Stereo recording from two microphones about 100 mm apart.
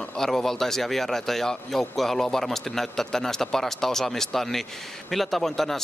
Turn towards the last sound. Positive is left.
turn(degrees=5)  # may be behind; listen again after turning